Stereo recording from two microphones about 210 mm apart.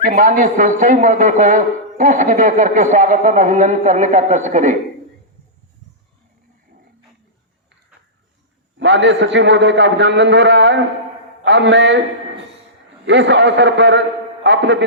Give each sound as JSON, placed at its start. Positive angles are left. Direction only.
{"t": 0.0, "sound": "a man's voice", "side_deg": -45}
{"t": 8.8, "sound": "a man's voice", "side_deg": -60}
{"t": 13.1, "sound": "a man's voice", "side_deg": -60}